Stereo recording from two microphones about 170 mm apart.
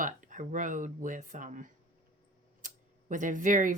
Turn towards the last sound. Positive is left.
turn(degrees=-50)  # may be behind; listen again after turning